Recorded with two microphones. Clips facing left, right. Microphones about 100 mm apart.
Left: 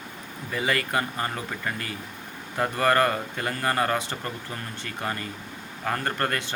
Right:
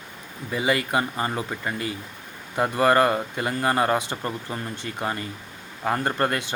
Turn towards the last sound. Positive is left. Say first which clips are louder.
# right 3 dB
turn(degrees=-20)  # may be behind; listen again after turning